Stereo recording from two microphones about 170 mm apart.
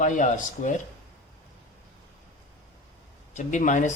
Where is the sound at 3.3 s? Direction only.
45° left (ahead or behind).